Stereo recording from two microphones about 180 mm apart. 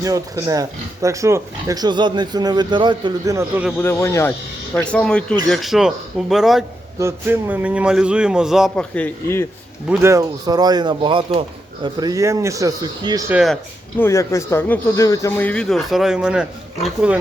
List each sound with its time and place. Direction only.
0.0 s speech: 15° right (ahead or behind)
3.8 s speech: 15° left (ahead or behind)
10.0 s speech: 15° right (ahead or behind)
13.3 s speech: centre (ahead or behind)
14.0 s speech: 15° left (ahead or behind); by 17.2 s 5° right (ahead or behind)